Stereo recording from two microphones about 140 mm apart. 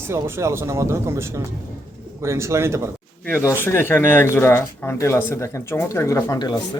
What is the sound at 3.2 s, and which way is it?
Speech, 15° left (ahead or behind).